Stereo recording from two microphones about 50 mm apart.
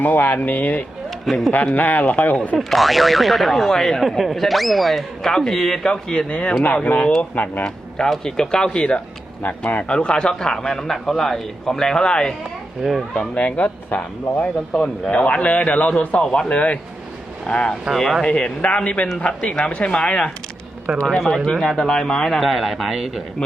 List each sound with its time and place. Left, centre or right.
0.0 s speech: left
1.2 s a man's voice: centre
1.5 s speech: left
2.6 s a man's voice: centre; by 7.6 s left
7.6 s a man's voice: centre
9.4 s speech: left
9.9 s speech: centre
12.8 s speech: centre
13.4 s speech: left
15.1 s a man's voice: left
17.9 s speech: centre
18.3 s a man's voice: left
21.2 s speech: centre
22.4 s speech: centre